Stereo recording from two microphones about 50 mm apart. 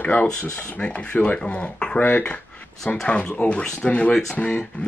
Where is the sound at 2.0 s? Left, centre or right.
Left.